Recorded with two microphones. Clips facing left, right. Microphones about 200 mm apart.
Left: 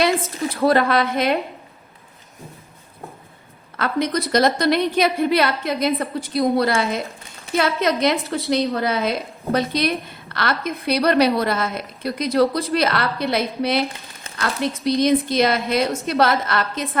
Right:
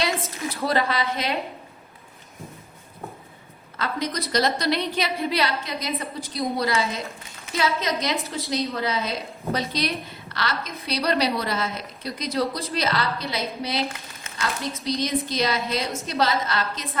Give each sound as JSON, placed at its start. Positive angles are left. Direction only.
{"t": 0.5, "sound": "a woman's voice", "side_deg": 55}
{"t": 3.8, "sound": "a woman's voice", "side_deg": 55}